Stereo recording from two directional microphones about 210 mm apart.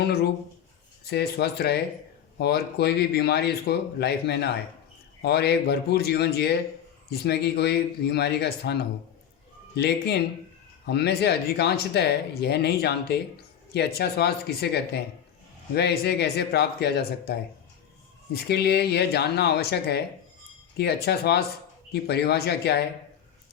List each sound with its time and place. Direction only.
1.0 s speech: 50° left (ahead or behind)
18.4 s speech: 50° left (ahead or behind)